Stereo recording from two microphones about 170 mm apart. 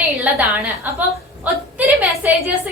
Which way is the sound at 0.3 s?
10° right (ahead or behind).